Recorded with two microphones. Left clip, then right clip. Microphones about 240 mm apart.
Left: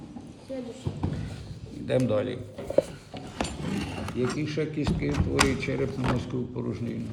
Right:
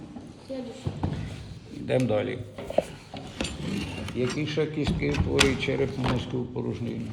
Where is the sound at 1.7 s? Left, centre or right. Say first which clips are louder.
Even; centre.